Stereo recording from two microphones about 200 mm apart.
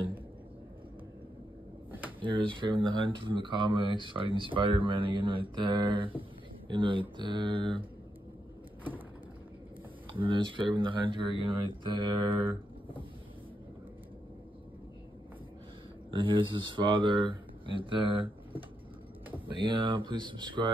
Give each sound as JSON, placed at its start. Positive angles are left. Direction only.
{"t": 2.0, "sound": "speech", "side_deg": -25}
{"t": 10.1, "sound": "speech", "side_deg": -25}
{"t": 16.1, "sound": "speech", "side_deg": -25}